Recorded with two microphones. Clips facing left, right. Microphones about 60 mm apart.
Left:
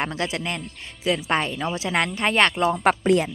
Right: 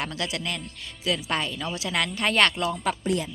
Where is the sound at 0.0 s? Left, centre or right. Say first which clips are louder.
Left 4 dB; left.